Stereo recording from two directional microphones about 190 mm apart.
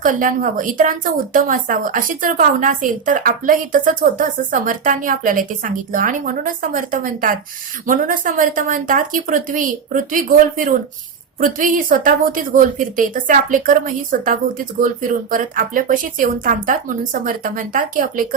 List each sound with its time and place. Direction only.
0.0 s speech: 45° right (ahead or behind)